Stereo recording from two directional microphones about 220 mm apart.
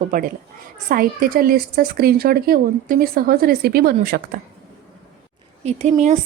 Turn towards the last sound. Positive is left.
turn(degrees=-35)  # may be behind; listen again after turning